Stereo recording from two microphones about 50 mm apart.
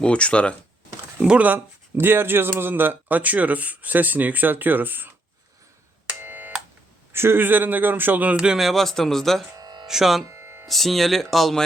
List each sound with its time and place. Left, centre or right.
0.0 s speech: left
1.5 s speech: right
6.2 s a sound: right
7.1 s speech: right
8.5 s speech: centre
9.8 s speech: centre
10.2 s music: right
10.7 s speech: centre